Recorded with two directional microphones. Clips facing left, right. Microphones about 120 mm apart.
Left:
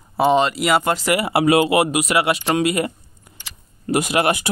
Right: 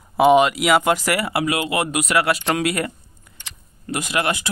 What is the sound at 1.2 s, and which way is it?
Speech, 30° left (ahead or behind).